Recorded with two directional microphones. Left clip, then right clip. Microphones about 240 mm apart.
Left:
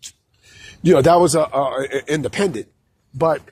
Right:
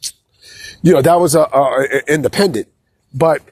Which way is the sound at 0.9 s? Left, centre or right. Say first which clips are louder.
Right 2 dB; right.